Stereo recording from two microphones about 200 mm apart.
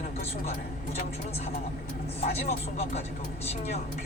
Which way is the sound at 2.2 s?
30° left (ahead or behind).